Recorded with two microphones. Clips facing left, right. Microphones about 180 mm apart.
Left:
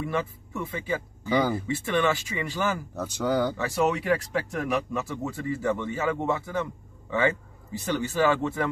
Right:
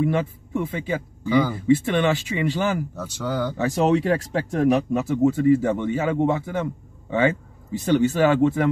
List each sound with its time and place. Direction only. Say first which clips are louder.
0.0 s a man's voice: right 7 dB; 20° right (ahead or behind)
1.3 s speech: right 4 dB; 15° left (ahead or behind)
1.7 s a man's voice: right 6 dB; 20° right (ahead or behind)
3.0 s speech: left 1 dB; 15° left (ahead or behind)
3.5 s a man's voice: right 6 dB; 30° right (ahead or behind)